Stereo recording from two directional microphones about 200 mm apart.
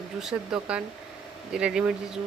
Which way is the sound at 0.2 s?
5° right (ahead or behind).